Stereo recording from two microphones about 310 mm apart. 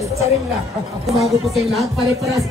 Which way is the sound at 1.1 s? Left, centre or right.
Centre.